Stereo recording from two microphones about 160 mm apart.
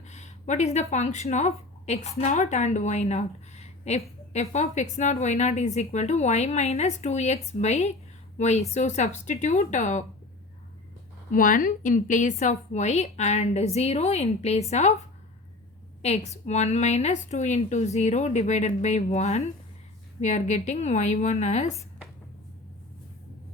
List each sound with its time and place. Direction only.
0.1 s a woman's voice: 45° left (ahead or behind)
11.3 s a woman's voice: 60° left (ahead or behind); by 14.9 s 45° left (ahead or behind)
16.0 s a woman's voice: 45° left (ahead or behind)